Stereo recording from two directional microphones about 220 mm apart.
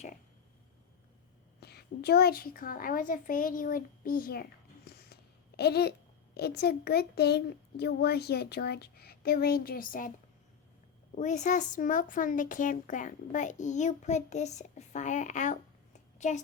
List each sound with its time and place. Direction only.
1.6 s a woman's voice: 45° left (ahead or behind)
11.1 s speech: 35° left (ahead or behind)